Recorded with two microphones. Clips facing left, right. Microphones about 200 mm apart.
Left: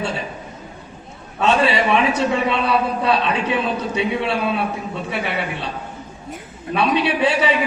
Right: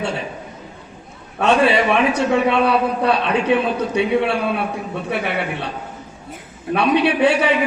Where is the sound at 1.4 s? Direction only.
55° right (ahead or behind).